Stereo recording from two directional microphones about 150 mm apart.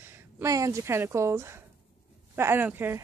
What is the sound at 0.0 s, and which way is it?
Speech, 15° right (ahead or behind).